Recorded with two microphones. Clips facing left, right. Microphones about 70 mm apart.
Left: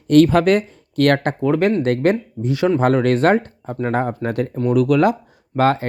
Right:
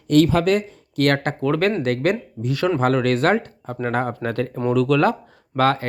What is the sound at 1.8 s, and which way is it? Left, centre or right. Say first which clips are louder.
Speech: left 3 dB; left.